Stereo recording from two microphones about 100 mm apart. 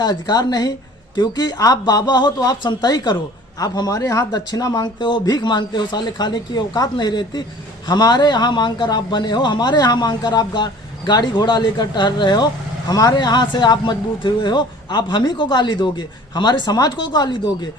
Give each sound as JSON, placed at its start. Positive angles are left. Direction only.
{"t": 0.0, "sound": "speech", "side_deg": 45}